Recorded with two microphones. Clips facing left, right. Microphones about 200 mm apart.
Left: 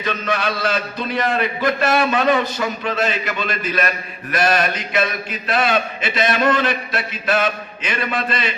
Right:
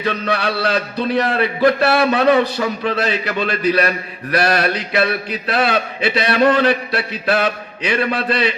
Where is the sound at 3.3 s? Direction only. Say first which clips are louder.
Right 6 dB; 35° right (ahead or behind).